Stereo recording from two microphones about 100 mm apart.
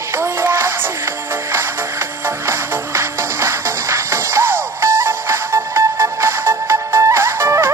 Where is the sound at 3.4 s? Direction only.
25° right (ahead or behind).